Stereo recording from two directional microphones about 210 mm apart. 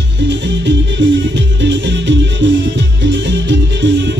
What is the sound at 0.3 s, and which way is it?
Music, 55° right (ahead or behind).